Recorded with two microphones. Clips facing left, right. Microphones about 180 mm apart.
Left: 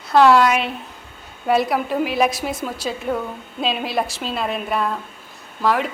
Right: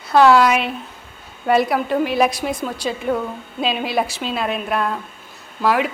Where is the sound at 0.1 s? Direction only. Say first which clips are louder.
Right 1 dB; centre (ahead or behind).